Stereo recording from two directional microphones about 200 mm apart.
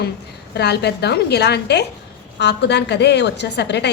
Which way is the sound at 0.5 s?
55° left (ahead or behind).